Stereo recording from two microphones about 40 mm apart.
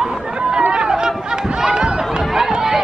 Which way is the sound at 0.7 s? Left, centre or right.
Centre.